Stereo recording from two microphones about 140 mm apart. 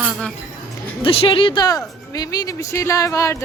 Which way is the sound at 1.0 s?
40° left (ahead or behind).